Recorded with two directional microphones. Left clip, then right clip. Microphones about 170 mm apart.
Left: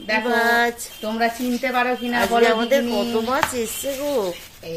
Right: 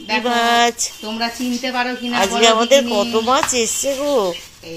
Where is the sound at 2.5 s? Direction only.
10° right (ahead or behind).